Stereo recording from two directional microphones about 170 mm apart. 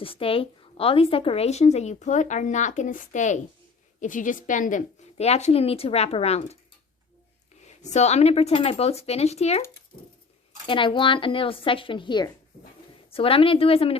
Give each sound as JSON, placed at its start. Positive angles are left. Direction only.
{"t": 0.0, "sound": "a woman's voice", "side_deg": 35}
{"t": 7.6, "sound": "a woman's voice", "side_deg": 40}
{"t": 10.7, "sound": "a woman's voice", "side_deg": 30}